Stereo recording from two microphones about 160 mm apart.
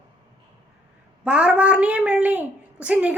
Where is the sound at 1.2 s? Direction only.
5° right (ahead or behind).